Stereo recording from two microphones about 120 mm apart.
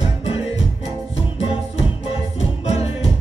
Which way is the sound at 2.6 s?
60° left (ahead or behind).